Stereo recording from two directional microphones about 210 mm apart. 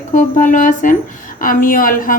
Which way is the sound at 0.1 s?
40° left (ahead or behind).